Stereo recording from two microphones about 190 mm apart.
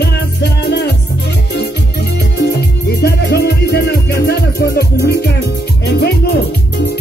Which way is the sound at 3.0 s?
60° left (ahead or behind).